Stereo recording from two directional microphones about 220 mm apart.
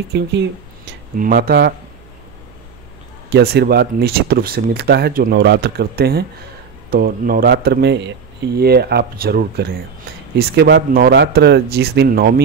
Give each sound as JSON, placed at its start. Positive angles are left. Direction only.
{"t": 0.1, "sound": "speech", "side_deg": -50}
{"t": 3.3, "sound": "speech", "side_deg": -45}